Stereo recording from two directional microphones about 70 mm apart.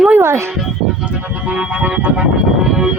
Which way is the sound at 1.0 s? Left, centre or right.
Centre.